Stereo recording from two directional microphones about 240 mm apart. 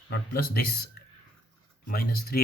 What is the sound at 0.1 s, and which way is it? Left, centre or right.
Speech, left.